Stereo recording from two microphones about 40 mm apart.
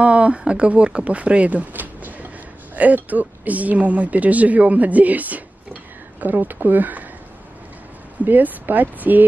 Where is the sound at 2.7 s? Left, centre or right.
Right.